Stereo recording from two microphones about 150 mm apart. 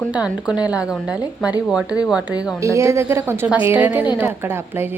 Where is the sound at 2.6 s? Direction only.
20° right (ahead or behind).